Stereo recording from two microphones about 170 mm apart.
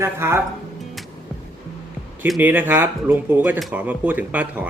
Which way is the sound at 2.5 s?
10° right (ahead or behind).